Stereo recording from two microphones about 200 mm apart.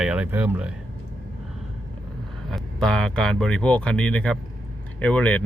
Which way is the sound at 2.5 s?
5° left (ahead or behind).